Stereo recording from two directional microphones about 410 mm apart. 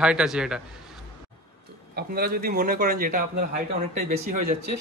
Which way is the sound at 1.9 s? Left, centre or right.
Right.